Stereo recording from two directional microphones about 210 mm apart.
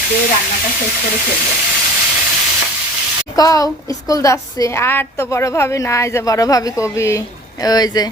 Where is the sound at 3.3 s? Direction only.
15° left (ahead or behind).